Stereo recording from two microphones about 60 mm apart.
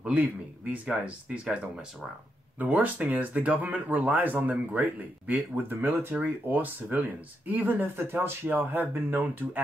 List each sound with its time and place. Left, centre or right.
0.0 s speech: right
8.5 s speech: right